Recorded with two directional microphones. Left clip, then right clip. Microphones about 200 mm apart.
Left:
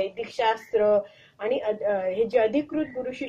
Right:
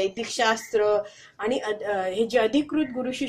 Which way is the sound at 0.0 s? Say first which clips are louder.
Right 1 dB; 45° right (ahead or behind).